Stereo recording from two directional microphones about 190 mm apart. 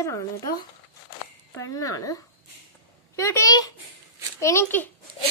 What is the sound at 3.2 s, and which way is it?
Speech, 15° left (ahead or behind).